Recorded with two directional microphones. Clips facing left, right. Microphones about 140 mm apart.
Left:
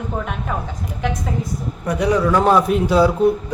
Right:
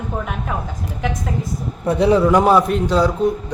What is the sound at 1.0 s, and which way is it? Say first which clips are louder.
Speech: left 1 dB; centre (ahead or behind).